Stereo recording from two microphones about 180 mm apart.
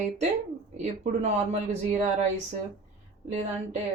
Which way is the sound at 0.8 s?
35° right (ahead or behind).